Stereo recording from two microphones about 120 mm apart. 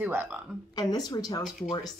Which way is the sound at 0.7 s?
35° left (ahead or behind).